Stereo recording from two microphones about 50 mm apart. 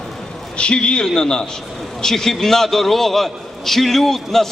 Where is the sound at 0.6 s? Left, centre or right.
Centre.